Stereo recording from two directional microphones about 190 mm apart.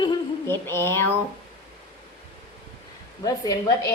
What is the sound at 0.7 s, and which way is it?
Speech, 10° left (ahead or behind).